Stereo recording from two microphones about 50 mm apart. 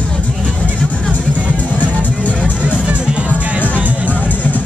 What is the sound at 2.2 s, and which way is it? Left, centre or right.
Music, left.